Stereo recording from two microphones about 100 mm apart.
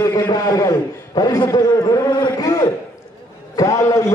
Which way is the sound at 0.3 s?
35° left (ahead or behind).